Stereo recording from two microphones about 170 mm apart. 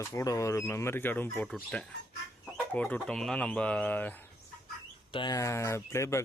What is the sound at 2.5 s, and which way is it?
Speech, 5° left (ahead or behind).